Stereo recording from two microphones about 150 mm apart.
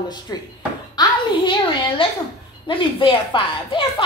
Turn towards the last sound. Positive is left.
turn(degrees=35)  # may be behind; listen again after turning